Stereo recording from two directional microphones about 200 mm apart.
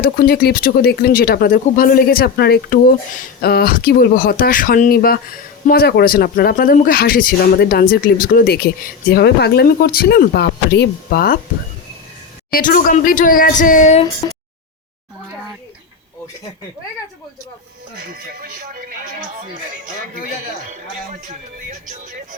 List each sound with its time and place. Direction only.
0.0 s speech: 50° left (ahead or behind)
12.5 s speech: 45° left (ahead or behind)
18.4 s speech: 45° right (ahead or behind)